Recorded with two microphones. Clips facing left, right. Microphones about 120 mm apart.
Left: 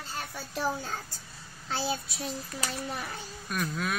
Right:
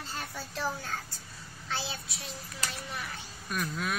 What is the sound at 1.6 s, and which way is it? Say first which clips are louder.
Child singing: left 5 dB; 35° left (ahead or behind).